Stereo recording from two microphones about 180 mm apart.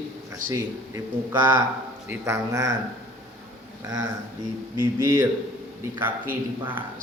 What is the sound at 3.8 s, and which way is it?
A man's voice, 20° right (ahead or behind).